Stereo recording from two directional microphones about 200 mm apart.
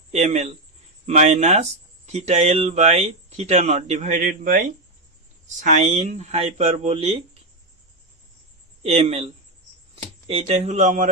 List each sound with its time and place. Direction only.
0.1 s speech: 35° right (ahead or behind)
5.6 s speech: 35° right (ahead or behind)
8.8 s speech: 30° right (ahead or behind)